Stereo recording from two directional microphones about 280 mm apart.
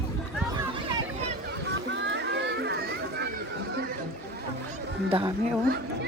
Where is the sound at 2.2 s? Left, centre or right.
Right.